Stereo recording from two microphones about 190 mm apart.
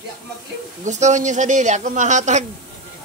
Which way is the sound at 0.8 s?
40° right (ahead or behind).